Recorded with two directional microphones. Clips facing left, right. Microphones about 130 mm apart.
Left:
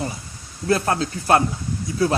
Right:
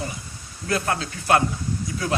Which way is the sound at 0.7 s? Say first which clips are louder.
Left 5 dB; 35° left (ahead or behind).